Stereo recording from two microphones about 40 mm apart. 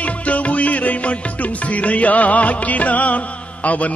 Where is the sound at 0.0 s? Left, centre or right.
Left.